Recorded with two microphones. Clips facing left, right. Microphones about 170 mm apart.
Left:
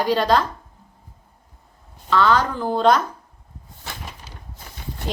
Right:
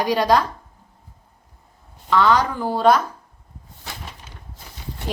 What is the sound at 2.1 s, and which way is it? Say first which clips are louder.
Speech: right 1 dB; 15° right (ahead or behind).